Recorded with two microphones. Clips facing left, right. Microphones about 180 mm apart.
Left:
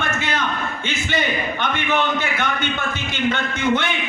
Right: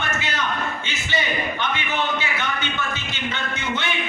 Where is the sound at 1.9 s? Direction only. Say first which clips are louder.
Left 4 dB; 50° left (ahead or behind).